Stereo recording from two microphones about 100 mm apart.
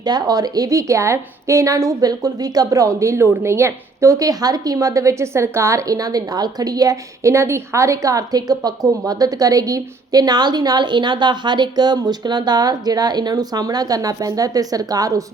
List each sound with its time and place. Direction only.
0.0 s a woman's voice: 40° right (ahead or behind)